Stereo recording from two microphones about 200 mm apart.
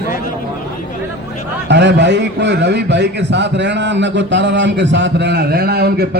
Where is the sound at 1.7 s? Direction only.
60° right (ahead or behind).